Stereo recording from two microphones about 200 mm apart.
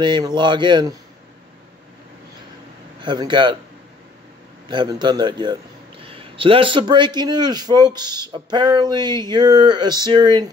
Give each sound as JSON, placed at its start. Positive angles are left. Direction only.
{"t": 0.0, "sound": "a man's voice", "side_deg": -20}
{"t": 3.0, "sound": "a man's voice", "side_deg": -25}
{"t": 4.6, "sound": "a man's voice", "side_deg": -20}